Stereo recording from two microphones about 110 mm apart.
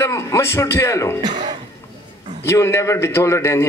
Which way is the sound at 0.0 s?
25° left (ahead or behind).